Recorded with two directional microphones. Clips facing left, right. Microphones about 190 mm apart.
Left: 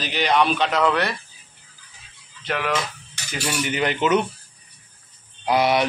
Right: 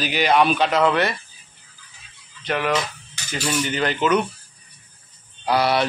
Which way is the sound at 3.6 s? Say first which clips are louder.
Left 2 dB; 15° left (ahead or behind).